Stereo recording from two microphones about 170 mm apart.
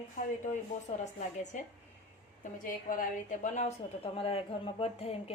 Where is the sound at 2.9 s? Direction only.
50° left (ahead or behind).